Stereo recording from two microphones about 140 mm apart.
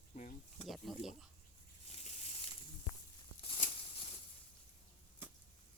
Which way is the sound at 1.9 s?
50° left (ahead or behind).